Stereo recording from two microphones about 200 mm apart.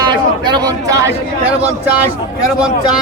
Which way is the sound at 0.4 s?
20° right (ahead or behind).